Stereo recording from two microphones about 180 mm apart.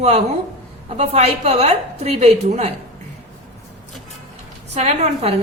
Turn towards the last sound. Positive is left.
turn(degrees=-35)  # may be behind; listen again after turning